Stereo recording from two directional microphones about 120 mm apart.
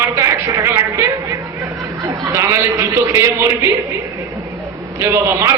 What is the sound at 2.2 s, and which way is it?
Speech, 25° right (ahead or behind).